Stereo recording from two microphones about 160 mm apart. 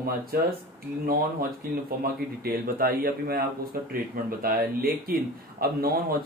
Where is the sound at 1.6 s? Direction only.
70° right (ahead or behind).